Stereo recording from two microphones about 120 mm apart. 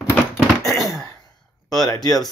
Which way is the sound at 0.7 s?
Centre (ahead or behind).